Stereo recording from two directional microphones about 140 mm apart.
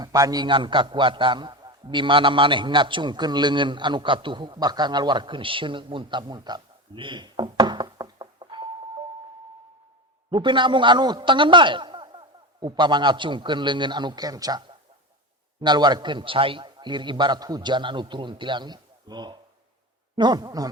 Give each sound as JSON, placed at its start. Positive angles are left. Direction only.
{"t": 0.0, "sound": "a man's voice", "side_deg": -25}
{"t": 10.3, "sound": "a man's voice", "side_deg": -35}
{"t": 15.6, "sound": "a man's voice", "side_deg": -30}